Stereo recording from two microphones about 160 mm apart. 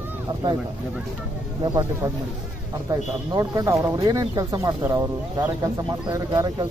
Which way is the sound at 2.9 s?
20° right (ahead or behind).